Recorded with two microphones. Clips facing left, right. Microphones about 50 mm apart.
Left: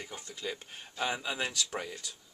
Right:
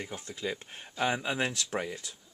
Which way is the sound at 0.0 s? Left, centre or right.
Centre.